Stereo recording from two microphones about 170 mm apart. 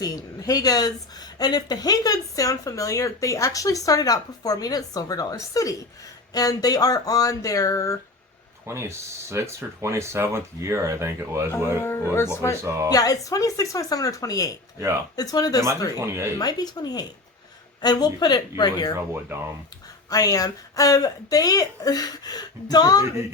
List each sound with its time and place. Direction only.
0.0 s speech: 20° left (ahead or behind)
8.6 s speech: 15° right (ahead or behind)
12.1 s speech: 15° left (ahead or behind)
12.6 s speech: 15° right (ahead or behind)
12.9 s speech: 20° left (ahead or behind)
16.0 s speech: 15° right (ahead or behind)
16.4 s speech: 25° left (ahead or behind)
18.9 s speech: 15° right (ahead or behind)
20.1 s speech: 20° left (ahead or behind)